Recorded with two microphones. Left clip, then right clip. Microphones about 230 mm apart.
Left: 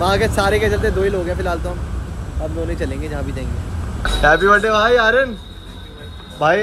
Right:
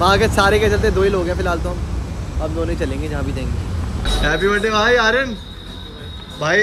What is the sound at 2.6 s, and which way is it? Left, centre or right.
Speech, centre.